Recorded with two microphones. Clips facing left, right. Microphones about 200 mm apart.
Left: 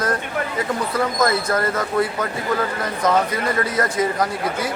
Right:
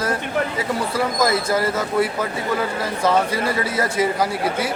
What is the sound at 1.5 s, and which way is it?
Speech, 5° right (ahead or behind).